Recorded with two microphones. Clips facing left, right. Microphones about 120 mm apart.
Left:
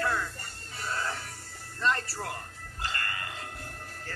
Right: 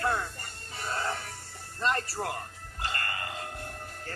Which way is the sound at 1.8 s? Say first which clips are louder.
Even; 20° right (ahead or behind).